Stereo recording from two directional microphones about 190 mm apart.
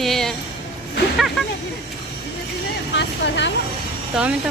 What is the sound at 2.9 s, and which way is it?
Speech, 70° left (ahead or behind).